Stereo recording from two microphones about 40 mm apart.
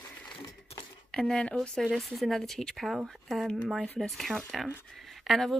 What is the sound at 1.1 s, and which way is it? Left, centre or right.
Speech, centre.